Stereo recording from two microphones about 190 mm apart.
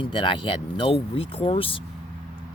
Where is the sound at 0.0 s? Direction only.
25° left (ahead or behind).